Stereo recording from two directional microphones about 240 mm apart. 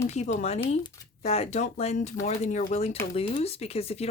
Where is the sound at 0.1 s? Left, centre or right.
Left.